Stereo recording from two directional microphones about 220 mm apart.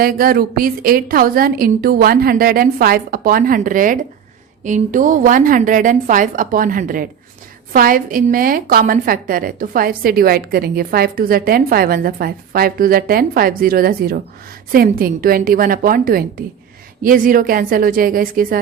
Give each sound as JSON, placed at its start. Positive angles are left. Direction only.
{"t": 0.0, "sound": "a woman's voice", "side_deg": -40}